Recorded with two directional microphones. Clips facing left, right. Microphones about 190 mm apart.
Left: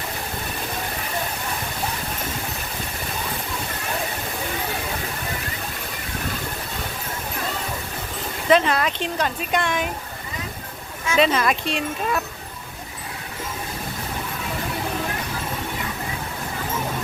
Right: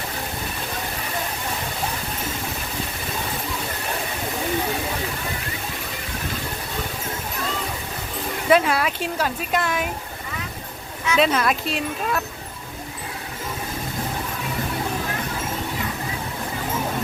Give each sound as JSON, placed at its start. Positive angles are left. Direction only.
{"t": 8.4, "sound": "speech", "side_deg": -5}
{"t": 11.2, "sound": "speech", "side_deg": 0}